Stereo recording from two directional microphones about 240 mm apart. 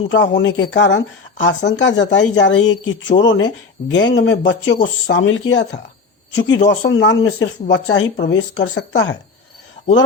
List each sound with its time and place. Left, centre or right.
0.1 s speech: left